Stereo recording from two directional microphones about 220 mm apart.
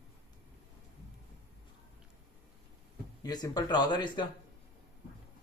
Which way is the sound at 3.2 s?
15° left (ahead or behind).